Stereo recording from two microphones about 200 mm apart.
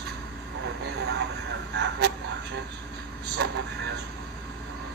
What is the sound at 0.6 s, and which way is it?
Speech, 55° right (ahead or behind).